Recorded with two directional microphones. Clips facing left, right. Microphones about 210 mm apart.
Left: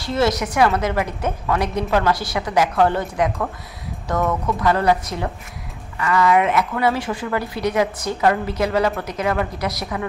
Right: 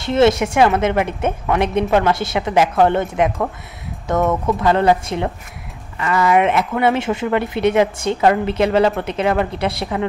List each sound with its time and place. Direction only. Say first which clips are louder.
0.0 s speech: right 6 dB; 25° right (ahead or behind)